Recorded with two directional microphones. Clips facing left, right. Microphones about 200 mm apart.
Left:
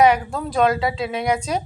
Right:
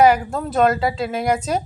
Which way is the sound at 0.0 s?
5° right (ahead or behind).